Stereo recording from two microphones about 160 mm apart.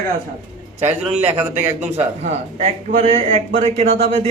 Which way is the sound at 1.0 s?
10° right (ahead or behind).